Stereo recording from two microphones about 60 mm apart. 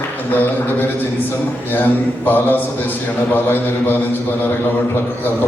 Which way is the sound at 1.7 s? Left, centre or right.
Left.